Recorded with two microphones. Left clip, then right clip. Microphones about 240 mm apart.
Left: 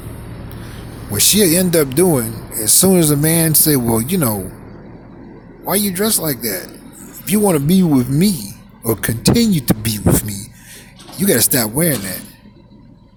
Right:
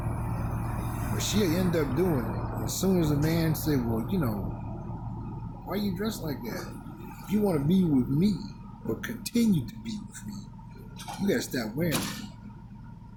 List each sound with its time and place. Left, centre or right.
1.1 s speech: left
5.6 s speech: left